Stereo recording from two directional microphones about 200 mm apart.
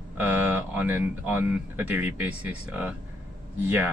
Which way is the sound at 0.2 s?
10° right (ahead or behind).